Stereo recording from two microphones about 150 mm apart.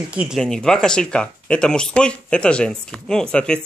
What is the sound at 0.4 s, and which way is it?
Speech, 5° left (ahead or behind).